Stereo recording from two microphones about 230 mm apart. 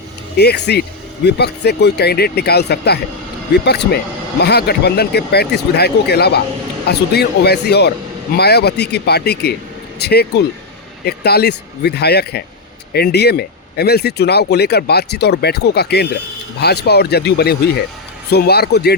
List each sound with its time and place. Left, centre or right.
0.3 s speech: left